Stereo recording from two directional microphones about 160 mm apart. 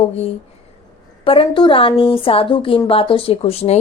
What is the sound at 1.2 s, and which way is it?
A woman's voice, 35° left (ahead or behind).